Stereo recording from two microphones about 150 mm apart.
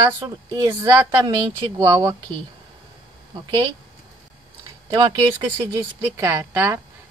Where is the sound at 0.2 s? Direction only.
20° right (ahead or behind).